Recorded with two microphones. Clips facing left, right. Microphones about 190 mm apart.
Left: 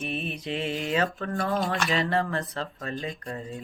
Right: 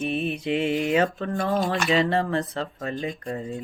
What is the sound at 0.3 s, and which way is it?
Speech, 25° right (ahead or behind).